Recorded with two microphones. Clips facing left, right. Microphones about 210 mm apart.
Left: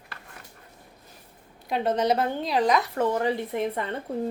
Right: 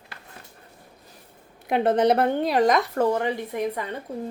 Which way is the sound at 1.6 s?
65° right (ahead or behind).